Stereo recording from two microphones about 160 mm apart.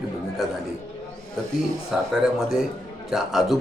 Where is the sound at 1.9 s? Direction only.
5° right (ahead or behind).